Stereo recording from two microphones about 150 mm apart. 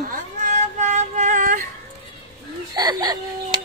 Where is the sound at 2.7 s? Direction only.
25° right (ahead or behind).